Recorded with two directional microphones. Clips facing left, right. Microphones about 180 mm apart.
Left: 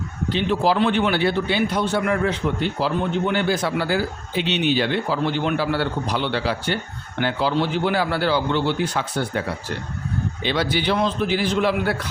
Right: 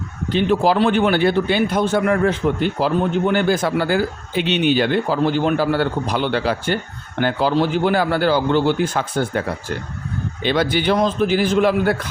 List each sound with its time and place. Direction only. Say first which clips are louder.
0.3 s speech: right 4 dB; 50° right (ahead or behind)
10.4 s speech: right 5 dB; 50° right (ahead or behind)